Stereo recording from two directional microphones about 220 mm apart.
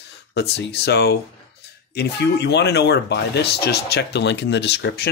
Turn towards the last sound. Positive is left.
turn(degrees=50)  # may be behind; listen again after turning